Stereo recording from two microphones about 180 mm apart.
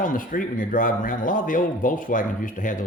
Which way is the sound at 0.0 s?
50° left (ahead or behind).